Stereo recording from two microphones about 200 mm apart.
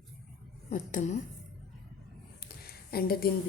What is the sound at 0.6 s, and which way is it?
Speech, 40° left (ahead or behind).